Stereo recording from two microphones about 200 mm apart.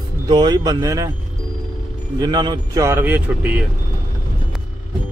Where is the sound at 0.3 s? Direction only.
20° right (ahead or behind).